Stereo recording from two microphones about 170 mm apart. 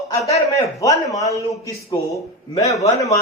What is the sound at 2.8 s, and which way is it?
Speech, 20° left (ahead or behind).